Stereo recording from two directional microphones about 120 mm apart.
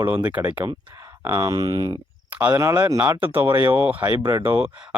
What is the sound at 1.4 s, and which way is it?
Speech, 30° right (ahead or behind).